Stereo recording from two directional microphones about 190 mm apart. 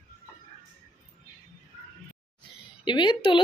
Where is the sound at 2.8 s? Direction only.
25° left (ahead or behind).